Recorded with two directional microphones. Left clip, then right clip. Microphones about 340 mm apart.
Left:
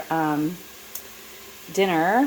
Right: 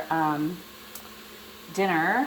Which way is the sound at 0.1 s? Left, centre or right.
Left.